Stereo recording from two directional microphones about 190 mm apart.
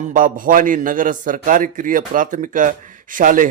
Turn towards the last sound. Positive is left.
turn(degrees=-45)  # may be behind; listen again after turning